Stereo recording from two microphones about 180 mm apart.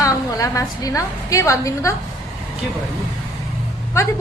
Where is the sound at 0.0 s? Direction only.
20° left (ahead or behind).